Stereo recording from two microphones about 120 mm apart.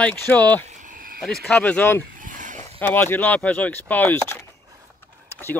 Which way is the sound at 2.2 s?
90° right.